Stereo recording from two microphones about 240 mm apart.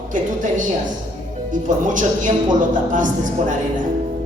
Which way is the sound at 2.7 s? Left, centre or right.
Right.